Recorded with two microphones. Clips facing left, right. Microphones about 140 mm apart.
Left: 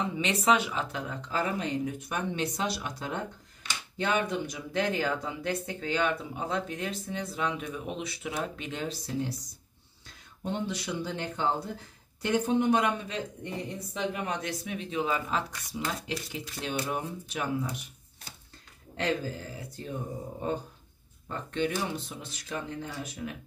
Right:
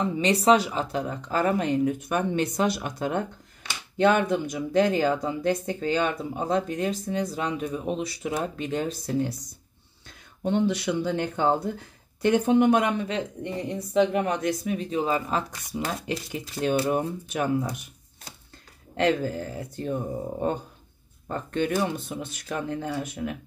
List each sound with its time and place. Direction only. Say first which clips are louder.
0.0 s speech: right 6 dB; 35° right (ahead or behind)
1.3 s speech: right 7 dB; 55° right (ahead or behind)
10.4 s speech: right 9 dB; 70° right (ahead or behind); by 15.8 s 40° right (ahead or behind)
16.1 s speech: right 5 dB; 55° right (ahead or behind)
18.9 s speech: right 7 dB; 65° right (ahead or behind)